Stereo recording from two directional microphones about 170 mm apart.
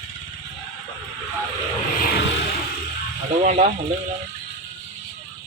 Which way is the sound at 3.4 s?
40° right (ahead or behind).